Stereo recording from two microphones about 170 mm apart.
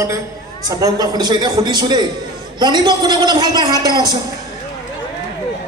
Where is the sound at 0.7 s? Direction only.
20° right (ahead or behind).